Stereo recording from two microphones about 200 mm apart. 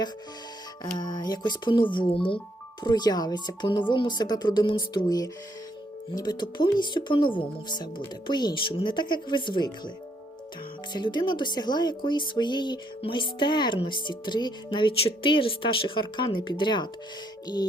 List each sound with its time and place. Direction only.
0.9 s speech: 20° left (ahead or behind)
10.9 s speech: 20° left (ahead or behind)